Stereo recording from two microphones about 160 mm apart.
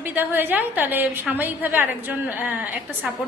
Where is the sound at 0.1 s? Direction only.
10° right (ahead or behind).